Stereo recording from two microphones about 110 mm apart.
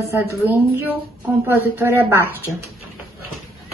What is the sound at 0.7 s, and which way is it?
A woman's voice, 20° right (ahead or behind).